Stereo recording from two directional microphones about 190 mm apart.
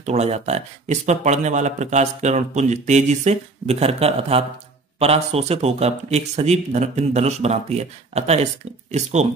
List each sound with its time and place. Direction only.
0.0 s speech: 35° right (ahead or behind)